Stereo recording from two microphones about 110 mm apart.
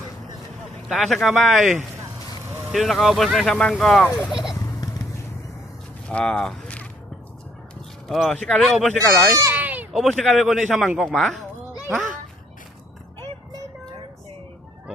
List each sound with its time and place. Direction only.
0.9 s speech: centre (ahead or behind)
4.3 s turkey: 5° right (ahead or behind)
4.6 s a sound: 35° left (ahead or behind)
6.1 s speech: 10° left (ahead or behind)
8.0 s speech: centre (ahead or behind)
9.1 s speech: 30° right (ahead or behind)
9.6 s a sound: 15° right (ahead or behind)
9.9 s speech: centre (ahead or behind)
11.9 s a child's voice: 10° right (ahead or behind)